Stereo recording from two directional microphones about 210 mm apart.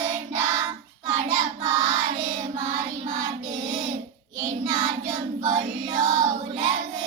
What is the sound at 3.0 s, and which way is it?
Child singing, 35° right (ahead or behind).